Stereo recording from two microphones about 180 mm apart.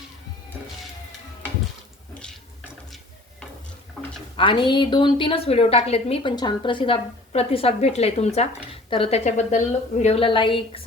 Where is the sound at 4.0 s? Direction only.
Centre (ahead or behind).